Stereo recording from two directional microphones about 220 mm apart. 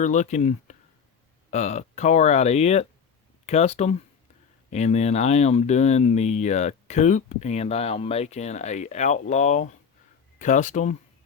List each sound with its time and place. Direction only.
0.0 s speech: 35° left (ahead or behind)